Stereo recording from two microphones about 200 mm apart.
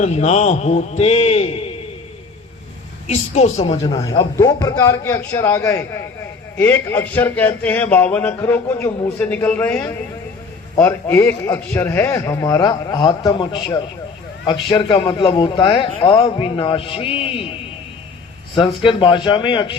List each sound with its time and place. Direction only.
0.0 s a man's voice: 35° left (ahead or behind)
3.1 s a man's voice: 35° left (ahead or behind)
4.4 s a man's voice: 15° left (ahead or behind)
18.5 s a man's voice: 25° left (ahead or behind)